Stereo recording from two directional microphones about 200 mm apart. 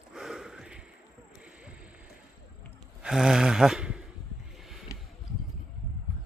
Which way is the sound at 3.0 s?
5° right (ahead or behind).